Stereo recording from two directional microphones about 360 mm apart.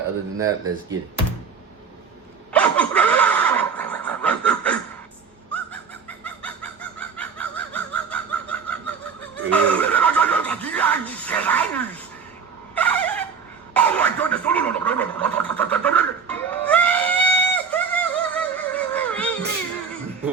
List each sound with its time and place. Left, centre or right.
0.3 s speech: centre
2.5 s neigh: centre
6.1 s fowl: centre
9.3 s neigh: centre
12.7 s dog: centre
13.7 s a sound: centre